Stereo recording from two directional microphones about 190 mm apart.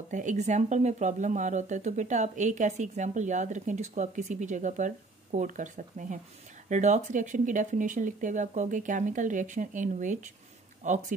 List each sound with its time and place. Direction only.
0.1 s speech: 40° right (ahead or behind)